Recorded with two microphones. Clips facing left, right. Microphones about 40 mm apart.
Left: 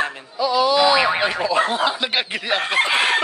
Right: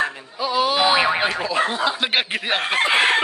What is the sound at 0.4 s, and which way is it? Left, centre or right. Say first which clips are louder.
Speech: left 3 dB; right.